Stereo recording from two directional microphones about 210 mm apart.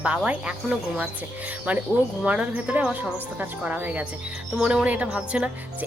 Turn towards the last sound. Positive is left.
turn(degrees=-5)  # may be behind; listen again after turning